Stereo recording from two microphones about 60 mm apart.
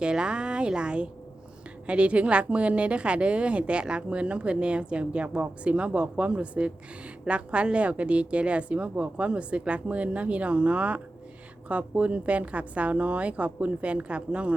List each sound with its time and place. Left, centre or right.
0.0 s a woman's voice: centre